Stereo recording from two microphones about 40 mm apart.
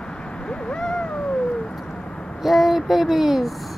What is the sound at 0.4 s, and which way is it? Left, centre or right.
Cat, left.